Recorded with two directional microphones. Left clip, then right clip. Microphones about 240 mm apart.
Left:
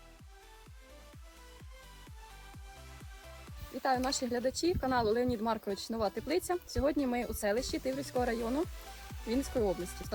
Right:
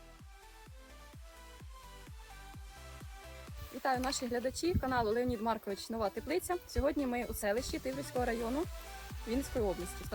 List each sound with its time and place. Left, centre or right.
3.8 s speech: centre